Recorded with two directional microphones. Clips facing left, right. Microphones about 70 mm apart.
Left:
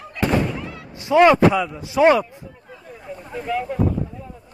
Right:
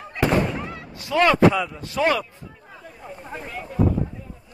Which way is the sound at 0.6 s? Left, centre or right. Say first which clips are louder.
Even; right.